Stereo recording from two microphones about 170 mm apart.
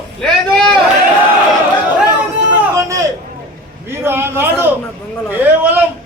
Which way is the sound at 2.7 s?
20° right (ahead or behind).